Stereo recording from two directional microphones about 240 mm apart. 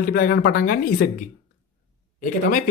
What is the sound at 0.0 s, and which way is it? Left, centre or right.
Speech, left.